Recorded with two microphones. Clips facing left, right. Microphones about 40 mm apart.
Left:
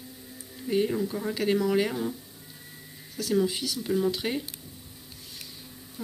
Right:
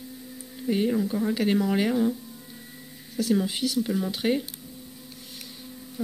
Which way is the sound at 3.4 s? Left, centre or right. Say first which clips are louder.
Right 2 dB; right.